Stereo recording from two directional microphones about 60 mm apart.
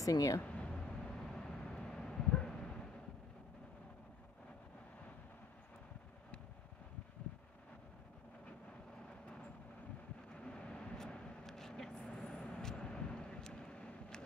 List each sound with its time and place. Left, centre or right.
0.0 s speech: left
0.4 s vehicle: left
10.3 s vehicle: centre